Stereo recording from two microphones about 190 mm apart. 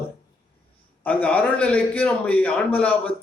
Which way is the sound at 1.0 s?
5° left (ahead or behind).